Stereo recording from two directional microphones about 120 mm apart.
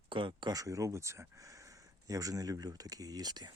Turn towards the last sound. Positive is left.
turn(degrees=-35)  # may be behind; listen again after turning